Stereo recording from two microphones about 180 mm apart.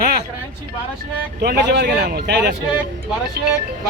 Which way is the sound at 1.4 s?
60° right (ahead or behind).